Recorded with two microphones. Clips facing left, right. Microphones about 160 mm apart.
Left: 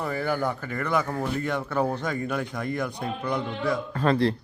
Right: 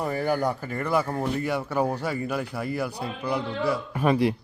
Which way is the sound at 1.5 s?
10° right (ahead or behind).